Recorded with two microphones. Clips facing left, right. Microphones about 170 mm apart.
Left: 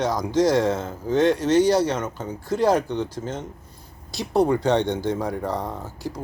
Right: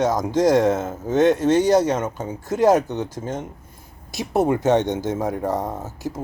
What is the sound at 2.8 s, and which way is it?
Speech, 45° right (ahead or behind).